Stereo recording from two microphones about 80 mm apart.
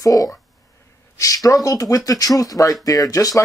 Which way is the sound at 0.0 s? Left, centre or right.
Left.